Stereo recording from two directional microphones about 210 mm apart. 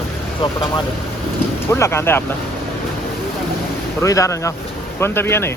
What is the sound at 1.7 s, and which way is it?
Speech, 10° left (ahead or behind).